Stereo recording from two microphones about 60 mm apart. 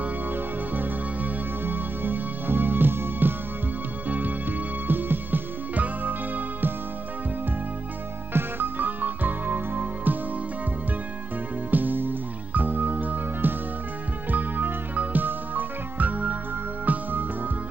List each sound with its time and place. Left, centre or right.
0.0 s music: right
8.3 s music: right
11.7 s music: right